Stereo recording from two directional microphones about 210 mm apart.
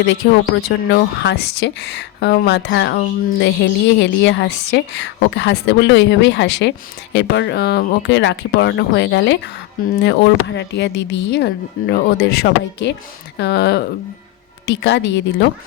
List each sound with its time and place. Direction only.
0.0 s a woman's voice: 60° left (ahead or behind)